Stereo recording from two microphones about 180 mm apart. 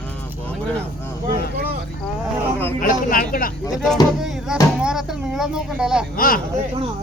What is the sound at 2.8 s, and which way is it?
Speech, 50° left (ahead or behind).